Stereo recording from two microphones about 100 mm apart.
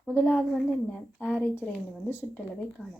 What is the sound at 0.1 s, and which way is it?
A woman's voice, 20° left (ahead or behind).